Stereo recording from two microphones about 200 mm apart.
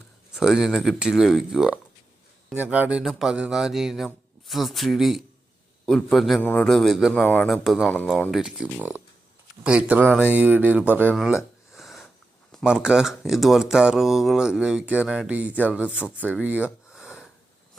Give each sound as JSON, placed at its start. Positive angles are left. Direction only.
{"t": 0.3, "sound": "a man's voice", "side_deg": 0}
{"t": 12.5, "sound": "a man's voice", "side_deg": 0}